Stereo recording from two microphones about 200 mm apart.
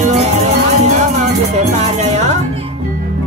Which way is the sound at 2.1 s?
35° right (ahead or behind).